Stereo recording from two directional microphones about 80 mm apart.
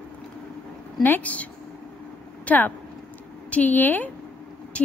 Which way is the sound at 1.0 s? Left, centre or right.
Left.